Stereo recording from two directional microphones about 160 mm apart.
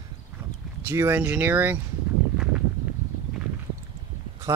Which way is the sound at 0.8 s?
15° right (ahead or behind).